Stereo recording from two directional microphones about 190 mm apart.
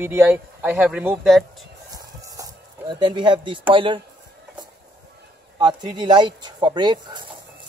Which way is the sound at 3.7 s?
25° right (ahead or behind).